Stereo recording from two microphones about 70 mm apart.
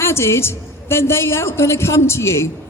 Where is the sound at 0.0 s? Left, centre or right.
Left.